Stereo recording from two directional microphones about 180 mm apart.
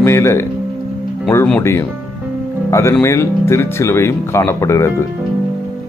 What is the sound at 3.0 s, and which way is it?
Speech, 15° left (ahead or behind).